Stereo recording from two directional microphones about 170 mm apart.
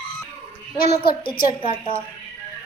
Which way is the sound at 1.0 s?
60° left (ahead or behind).